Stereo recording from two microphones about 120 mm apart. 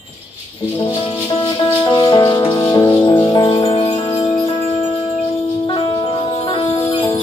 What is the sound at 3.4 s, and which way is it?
Music, 45° left (ahead or behind).